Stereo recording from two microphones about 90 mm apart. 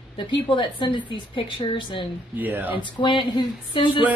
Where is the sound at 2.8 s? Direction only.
60° left (ahead or behind).